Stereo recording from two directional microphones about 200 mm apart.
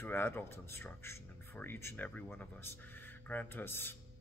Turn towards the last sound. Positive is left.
turn(degrees=10)  # may be behind; listen again after turning